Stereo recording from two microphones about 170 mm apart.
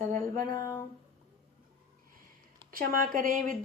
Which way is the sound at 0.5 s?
25° left (ahead or behind).